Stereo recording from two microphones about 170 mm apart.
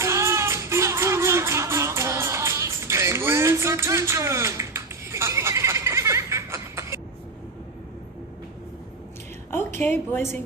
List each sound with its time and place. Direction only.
0.0 s music: 15° right (ahead or behind)
9.5 s a woman's voice: 10° left (ahead or behind)